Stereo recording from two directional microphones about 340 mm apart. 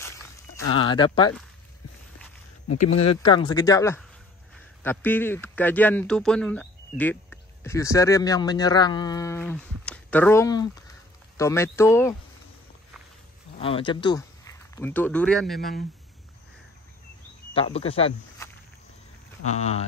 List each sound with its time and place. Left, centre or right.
0.7 s speech: centre
3.3 s speech: centre
13.6 s speech: centre
17.6 s speech: centre